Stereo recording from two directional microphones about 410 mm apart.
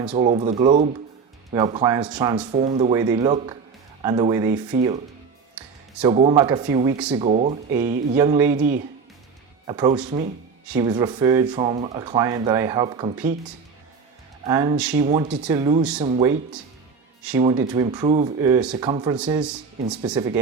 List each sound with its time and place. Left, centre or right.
0.0 s speech: centre
14.4 s speech: centre